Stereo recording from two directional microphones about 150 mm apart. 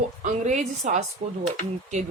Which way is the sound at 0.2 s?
50° right (ahead or behind).